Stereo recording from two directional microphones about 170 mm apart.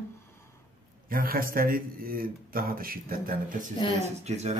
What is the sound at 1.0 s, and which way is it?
Speech, 60° right (ahead or behind).